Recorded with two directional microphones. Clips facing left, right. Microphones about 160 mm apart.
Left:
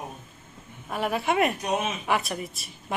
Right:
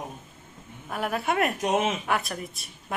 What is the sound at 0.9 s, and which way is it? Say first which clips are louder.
A woman's voice: left 2 dB; centre (ahead or behind).